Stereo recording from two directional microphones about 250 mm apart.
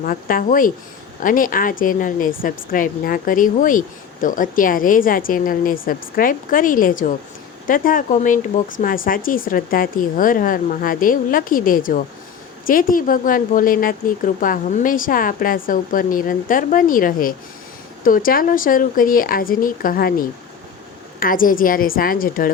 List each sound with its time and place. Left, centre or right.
0.0 s a woman's voice: left